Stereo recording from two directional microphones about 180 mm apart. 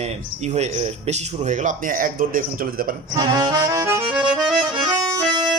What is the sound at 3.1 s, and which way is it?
Accordion, 25° right (ahead or behind).